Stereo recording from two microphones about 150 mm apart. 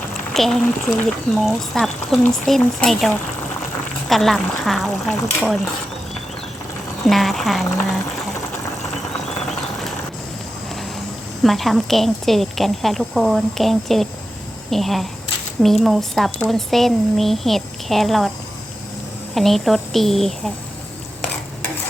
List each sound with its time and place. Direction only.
0.3 s speech: centre (ahead or behind)
4.1 s speech: centre (ahead or behind)
7.1 s speech: centre (ahead or behind)
11.4 s speech: centre (ahead or behind)
19.3 s speech: centre (ahead or behind)